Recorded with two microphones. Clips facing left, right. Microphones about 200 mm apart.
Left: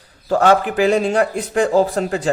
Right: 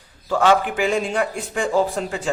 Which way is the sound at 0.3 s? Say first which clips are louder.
Left 3 dB; 40° left (ahead or behind).